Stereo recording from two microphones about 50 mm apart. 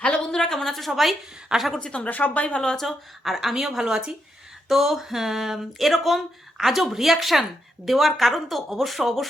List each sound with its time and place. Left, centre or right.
0.0 s speech: centre
1.8 s speech: left
2.0 s speech: left
2.6 s speech: centre
2.8 s speech: centre